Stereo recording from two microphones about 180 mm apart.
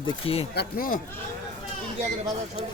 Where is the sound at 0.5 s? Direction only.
60° left (ahead or behind).